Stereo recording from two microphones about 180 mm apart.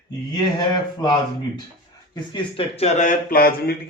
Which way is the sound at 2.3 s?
30° left (ahead or behind).